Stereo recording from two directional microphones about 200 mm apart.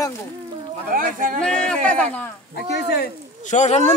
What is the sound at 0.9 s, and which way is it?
Speech, 40° right (ahead or behind).